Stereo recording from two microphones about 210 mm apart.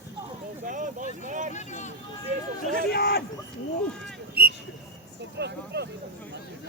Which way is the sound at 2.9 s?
50° left (ahead or behind).